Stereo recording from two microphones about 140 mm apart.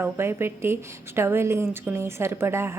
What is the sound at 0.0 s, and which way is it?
A woman's voice, 15° right (ahead or behind).